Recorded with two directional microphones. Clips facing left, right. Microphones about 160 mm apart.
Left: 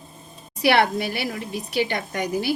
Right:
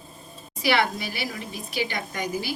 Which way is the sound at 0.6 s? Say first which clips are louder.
Left 5 dB; 60° left (ahead or behind).